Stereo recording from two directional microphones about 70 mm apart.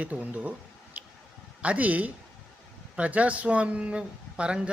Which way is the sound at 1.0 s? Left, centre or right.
Right.